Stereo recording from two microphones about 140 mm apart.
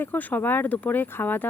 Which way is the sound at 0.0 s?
10° left (ahead or behind).